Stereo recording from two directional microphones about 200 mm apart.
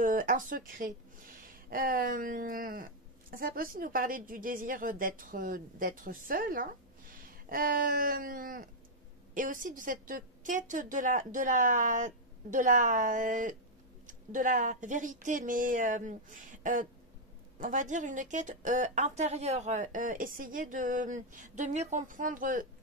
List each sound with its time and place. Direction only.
0.0 s a woman's voice: 45° right (ahead or behind)